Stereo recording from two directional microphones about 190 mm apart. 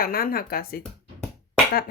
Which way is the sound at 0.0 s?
50° left (ahead or behind).